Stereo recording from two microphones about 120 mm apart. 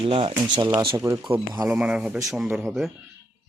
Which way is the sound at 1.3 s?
15° right (ahead or behind).